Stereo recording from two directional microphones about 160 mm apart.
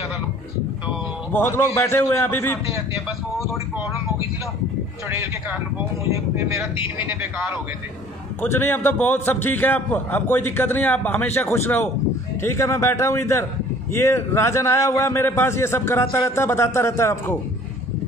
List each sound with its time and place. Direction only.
1.3 s a man's voice: 15° left (ahead or behind)
6.1 s speech: 20° right (ahead or behind)
8.4 s a man's voice: 15° left (ahead or behind)